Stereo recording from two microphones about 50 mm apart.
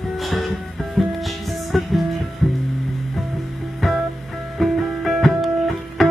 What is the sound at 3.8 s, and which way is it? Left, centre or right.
Music, centre.